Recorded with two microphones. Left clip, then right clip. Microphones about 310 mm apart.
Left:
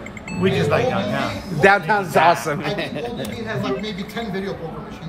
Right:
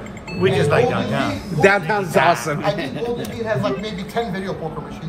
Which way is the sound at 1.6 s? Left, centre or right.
Left.